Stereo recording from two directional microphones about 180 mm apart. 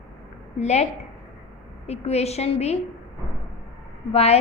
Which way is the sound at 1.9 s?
35° left (ahead or behind).